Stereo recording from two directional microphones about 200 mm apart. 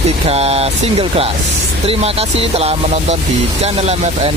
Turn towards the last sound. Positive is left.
turn(degrees=-30)  # may be behind; listen again after turning